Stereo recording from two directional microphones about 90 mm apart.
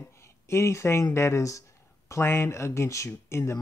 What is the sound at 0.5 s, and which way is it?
Speech, 30° left (ahead or behind).